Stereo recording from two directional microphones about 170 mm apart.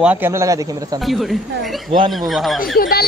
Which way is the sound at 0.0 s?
10° right (ahead or behind).